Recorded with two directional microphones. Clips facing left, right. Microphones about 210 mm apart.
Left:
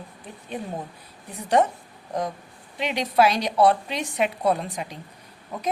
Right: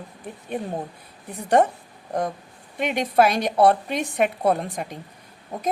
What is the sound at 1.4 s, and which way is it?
Speech, 55° right (ahead or behind).